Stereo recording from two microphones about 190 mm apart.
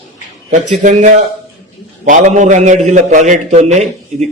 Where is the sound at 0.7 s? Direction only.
40° right (ahead or behind).